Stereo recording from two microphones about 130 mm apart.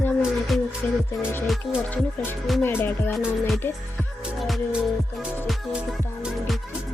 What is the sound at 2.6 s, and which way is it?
Speech, 15° left (ahead or behind).